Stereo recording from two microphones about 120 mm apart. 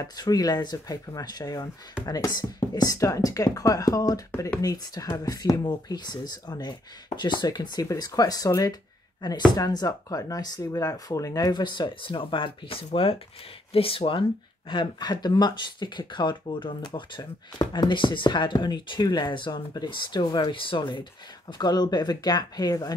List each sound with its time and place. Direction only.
0.0 s speech: 30° left (ahead or behind); by 14.2 s 45° left (ahead or behind)
14.7 s speech: 35° left (ahead or behind)